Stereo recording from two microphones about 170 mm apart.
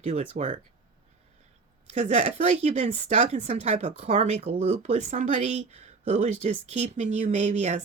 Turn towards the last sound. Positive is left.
turn(degrees=-45)  # may be behind; listen again after turning